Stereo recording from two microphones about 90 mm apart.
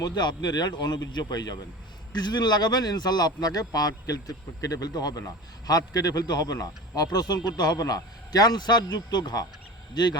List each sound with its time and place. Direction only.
0.0 s a man's voice: 55° left (ahead or behind)